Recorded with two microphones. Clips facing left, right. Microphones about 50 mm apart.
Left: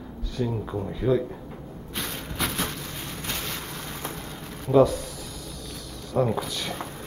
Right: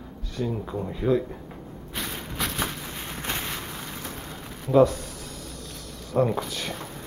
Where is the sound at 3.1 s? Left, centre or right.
Right.